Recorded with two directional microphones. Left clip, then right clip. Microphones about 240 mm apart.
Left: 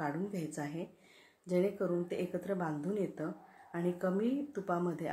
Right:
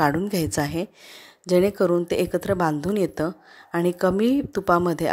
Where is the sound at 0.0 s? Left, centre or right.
Right.